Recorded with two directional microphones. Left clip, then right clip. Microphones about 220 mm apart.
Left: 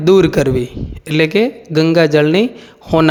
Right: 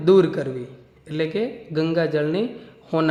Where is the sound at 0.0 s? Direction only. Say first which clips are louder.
Left 6 dB; 35° left (ahead or behind).